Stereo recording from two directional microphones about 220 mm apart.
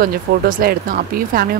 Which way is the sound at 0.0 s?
40° right (ahead or behind).